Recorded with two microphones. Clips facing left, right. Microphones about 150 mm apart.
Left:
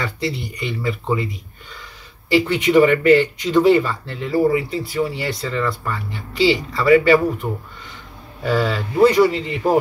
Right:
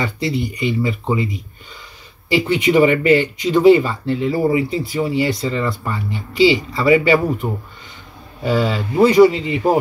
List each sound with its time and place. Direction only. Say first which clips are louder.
0.0 s speech: right 4 dB; 15° right (ahead or behind)
8.4 s speech: right 1 dB; 15° right (ahead or behind)